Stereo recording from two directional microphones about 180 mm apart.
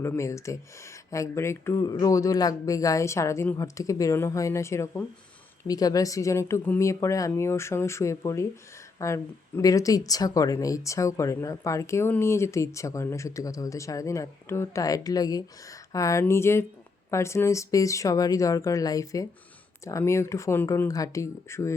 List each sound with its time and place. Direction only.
0.0 s speech: 15° left (ahead or behind)